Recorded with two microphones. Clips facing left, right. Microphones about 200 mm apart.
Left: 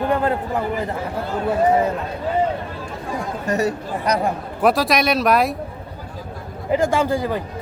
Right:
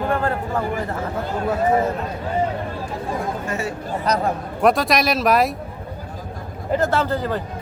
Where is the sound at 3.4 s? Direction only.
40° left (ahead or behind).